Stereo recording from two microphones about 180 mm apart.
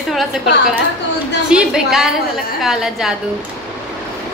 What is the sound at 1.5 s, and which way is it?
A woman's voice, 5° right (ahead or behind).